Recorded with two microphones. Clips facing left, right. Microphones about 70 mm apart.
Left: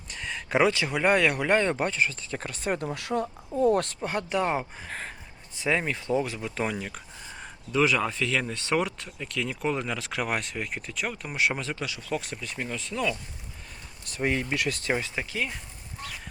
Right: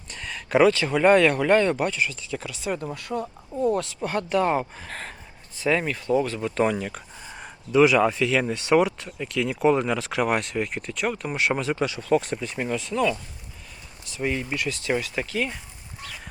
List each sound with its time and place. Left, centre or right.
0.1 s speech: centre; by 3.2 s left
3.5 s speech: centre
4.0 s speech: centre
6.4 s speech: centre
11.7 s speech: right
12.5 s speech: centre
12.7 s speech: centre
14.0 s speech: left
15.1 s speech: centre